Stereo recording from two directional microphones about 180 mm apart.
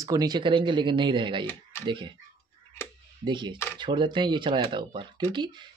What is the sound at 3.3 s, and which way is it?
Speech, 25° right (ahead or behind).